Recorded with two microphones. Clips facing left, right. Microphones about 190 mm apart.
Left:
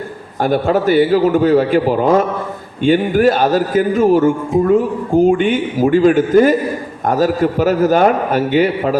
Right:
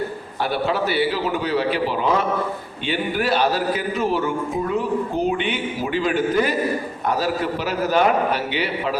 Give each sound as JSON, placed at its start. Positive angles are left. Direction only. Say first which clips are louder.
{"t": 0.4, "sound": "speech", "louder": "left 8 dB", "side_deg": 45}